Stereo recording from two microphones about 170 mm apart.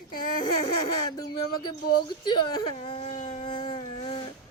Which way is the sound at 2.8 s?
35° left (ahead or behind).